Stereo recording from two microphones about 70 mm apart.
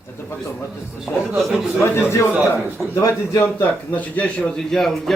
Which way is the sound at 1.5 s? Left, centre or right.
Centre.